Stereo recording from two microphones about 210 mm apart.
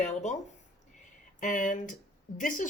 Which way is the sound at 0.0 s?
35° left (ahead or behind).